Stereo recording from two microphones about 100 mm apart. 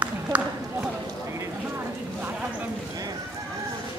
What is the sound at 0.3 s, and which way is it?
Run, 15° right (ahead or behind).